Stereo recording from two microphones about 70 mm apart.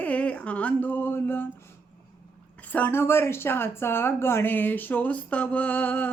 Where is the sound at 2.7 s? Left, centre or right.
Left.